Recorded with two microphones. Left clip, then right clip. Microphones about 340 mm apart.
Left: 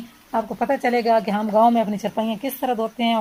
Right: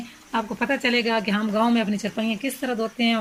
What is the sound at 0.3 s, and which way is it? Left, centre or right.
Speech, centre.